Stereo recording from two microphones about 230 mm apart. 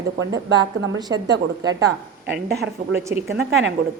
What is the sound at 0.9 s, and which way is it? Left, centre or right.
Speech, centre.